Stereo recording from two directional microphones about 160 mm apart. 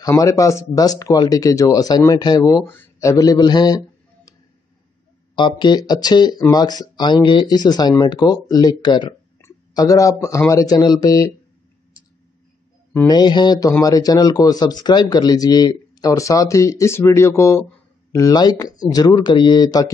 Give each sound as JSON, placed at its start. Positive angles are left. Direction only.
{"t": 0.1, "sound": "speech", "side_deg": 20}
{"t": 12.9, "sound": "speech", "side_deg": 20}